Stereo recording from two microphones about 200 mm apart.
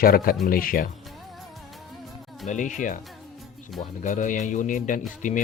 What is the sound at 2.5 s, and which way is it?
Speech, 40° left (ahead or behind).